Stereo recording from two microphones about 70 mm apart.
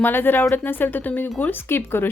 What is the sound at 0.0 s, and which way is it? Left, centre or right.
A woman's voice, left.